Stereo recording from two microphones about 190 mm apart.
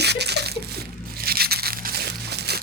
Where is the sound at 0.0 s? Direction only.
60° right (ahead or behind).